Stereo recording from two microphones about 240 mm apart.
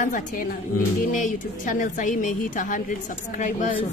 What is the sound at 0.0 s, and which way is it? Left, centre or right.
A woman's voice, left.